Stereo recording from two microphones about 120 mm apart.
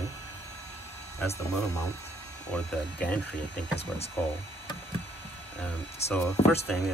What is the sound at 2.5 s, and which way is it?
Speech, 10° left (ahead or behind).